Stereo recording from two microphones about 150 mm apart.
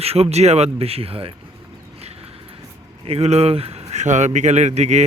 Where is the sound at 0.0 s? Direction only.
45° right (ahead or behind).